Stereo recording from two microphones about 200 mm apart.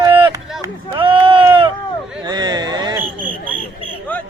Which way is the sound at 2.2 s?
20° right (ahead or behind).